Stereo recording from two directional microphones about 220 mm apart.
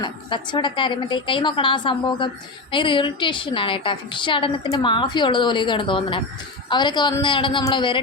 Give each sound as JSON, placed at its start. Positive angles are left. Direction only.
{"t": 0.0, "sound": "a woman's voice", "side_deg": 20}